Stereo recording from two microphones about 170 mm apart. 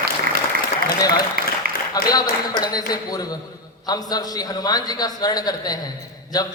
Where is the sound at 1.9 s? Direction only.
20° left (ahead or behind).